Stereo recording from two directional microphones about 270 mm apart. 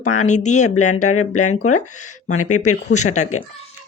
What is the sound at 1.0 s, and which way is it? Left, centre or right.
Speech, left.